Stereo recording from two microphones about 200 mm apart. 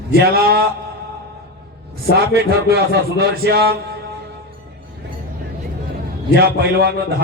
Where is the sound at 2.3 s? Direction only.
55° right (ahead or behind).